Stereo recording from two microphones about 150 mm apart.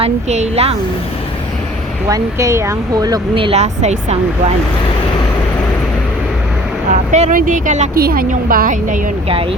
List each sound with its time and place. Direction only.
0.0 s speech: 45° right (ahead or behind)
2.0 s speech: 20° right (ahead or behind)
3.3 s speech: 40° right (ahead or behind)
7.1 s speech: 55° right (ahead or behind)
7.9 s a woman's voice: 85° right; by 9.0 s 60° right (ahead or behind)
9.3 s speech: 35° right (ahead or behind)